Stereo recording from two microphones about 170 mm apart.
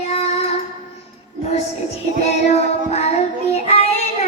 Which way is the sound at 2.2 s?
40° left (ahead or behind).